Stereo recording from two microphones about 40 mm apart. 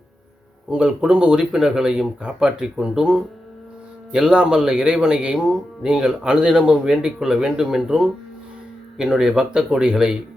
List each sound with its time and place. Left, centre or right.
0.7 s speech: right